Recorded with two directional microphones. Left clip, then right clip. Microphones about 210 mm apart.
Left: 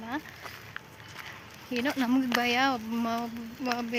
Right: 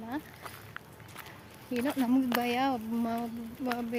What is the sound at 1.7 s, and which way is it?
Speech, centre (ahead or behind).